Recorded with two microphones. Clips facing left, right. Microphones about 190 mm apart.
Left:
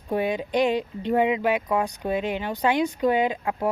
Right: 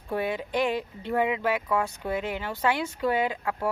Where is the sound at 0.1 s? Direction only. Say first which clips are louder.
Left 4 dB; 20° left (ahead or behind).